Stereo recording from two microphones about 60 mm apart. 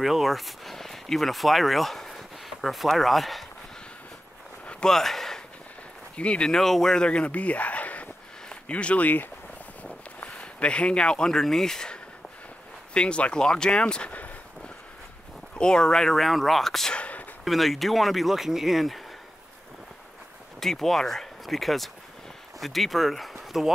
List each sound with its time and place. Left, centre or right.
0.0 s speech: centre
4.6 s a sound: centre
4.9 s speech: centre
6.1 s speech: centre
15.5 s speech: centre
16.9 s a sound: left
17.5 s speech: centre
20.6 s speech: centre